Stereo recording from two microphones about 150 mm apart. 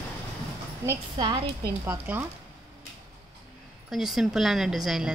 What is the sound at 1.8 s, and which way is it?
Speech, 10° right (ahead or behind).